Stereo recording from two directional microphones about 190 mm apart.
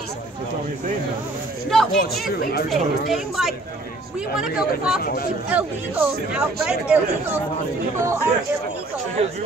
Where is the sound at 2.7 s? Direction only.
Centre (ahead or behind).